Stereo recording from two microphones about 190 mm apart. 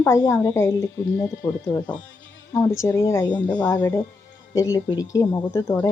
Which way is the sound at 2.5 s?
15° left (ahead or behind).